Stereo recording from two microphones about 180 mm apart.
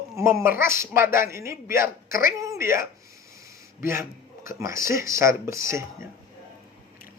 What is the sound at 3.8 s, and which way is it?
A man's voice, 15° right (ahead or behind).